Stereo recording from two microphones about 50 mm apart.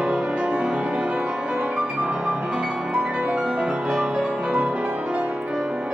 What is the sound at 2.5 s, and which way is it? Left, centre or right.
Music, centre.